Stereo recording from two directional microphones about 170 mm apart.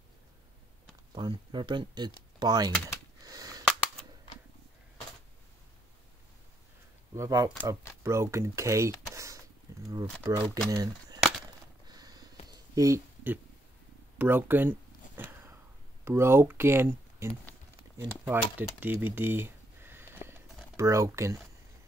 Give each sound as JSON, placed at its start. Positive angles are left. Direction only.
{"t": 1.1, "sound": "speech", "side_deg": -25}
{"t": 3.3, "sound": "cap gun", "side_deg": -20}
{"t": 7.2, "sound": "speech", "side_deg": -20}
{"t": 9.7, "sound": "a sound", "side_deg": -20}
{"t": 10.2, "sound": "speech", "side_deg": -15}
{"t": 11.9, "sound": "a sound", "side_deg": -25}
{"t": 16.0, "sound": "speech", "side_deg": -15}